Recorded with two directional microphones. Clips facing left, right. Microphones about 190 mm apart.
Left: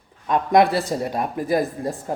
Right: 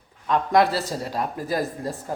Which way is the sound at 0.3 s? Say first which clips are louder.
Left 3 dB; 15° left (ahead or behind).